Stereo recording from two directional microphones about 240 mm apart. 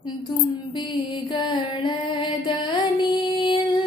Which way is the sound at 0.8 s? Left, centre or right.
Centre.